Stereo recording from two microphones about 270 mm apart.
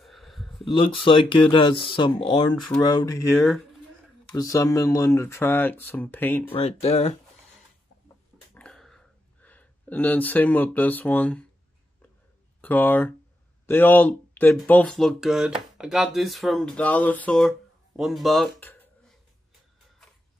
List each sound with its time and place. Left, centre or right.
0.0 s a sound: centre
0.7 s speech: centre
2.5 s speech: centre
2.8 s speech: centre
6.4 s speech: left
8.5 s a sound: centre
12.6 s speech: centre